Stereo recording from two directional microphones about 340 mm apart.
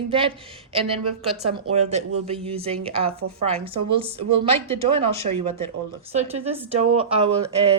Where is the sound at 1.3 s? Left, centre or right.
Centre.